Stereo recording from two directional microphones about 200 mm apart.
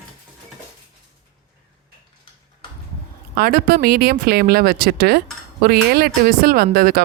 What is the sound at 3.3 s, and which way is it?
Speech, 50° right (ahead or behind).